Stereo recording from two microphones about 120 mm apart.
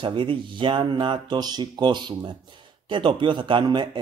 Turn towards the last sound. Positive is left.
turn(degrees=-40)  # may be behind; listen again after turning